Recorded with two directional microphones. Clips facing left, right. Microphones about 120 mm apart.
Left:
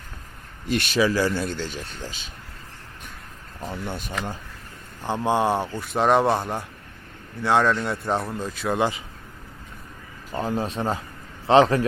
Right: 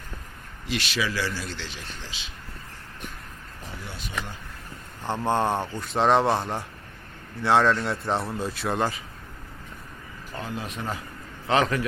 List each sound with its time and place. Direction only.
0.7 s speech: 45° left (ahead or behind)
3.8 s speech: 50° left (ahead or behind)
5.0 s speech: 15° left (ahead or behind)
10.3 s speech: 35° left (ahead or behind)